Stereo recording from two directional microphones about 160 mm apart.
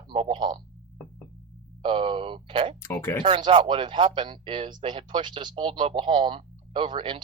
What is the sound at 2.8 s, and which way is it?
Speech, 15° left (ahead or behind).